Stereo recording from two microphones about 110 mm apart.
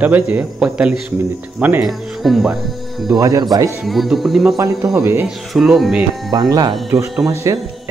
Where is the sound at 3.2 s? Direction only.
30° right (ahead or behind).